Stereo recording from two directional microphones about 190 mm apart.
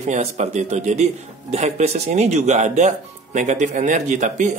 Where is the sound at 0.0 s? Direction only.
35° right (ahead or behind).